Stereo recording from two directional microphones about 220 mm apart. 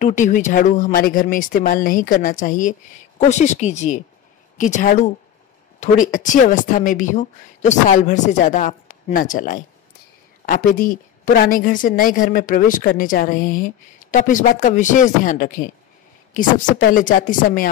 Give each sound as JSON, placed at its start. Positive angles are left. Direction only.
{"t": 0.0, "sound": "a woman's voice", "side_deg": 35}